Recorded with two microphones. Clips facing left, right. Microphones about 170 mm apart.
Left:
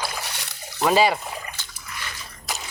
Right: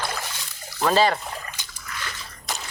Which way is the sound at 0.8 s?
10° left (ahead or behind).